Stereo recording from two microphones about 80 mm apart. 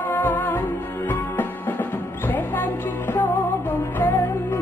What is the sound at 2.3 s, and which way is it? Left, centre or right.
Music, left.